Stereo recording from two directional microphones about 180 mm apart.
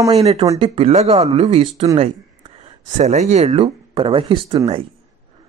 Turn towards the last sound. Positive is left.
turn(degrees=-30)  # may be behind; listen again after turning